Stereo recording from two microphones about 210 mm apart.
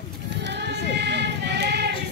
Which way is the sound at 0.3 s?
55° right (ahead or behind).